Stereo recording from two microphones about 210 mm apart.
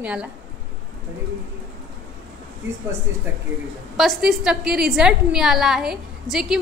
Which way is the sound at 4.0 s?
Centre (ahead or behind).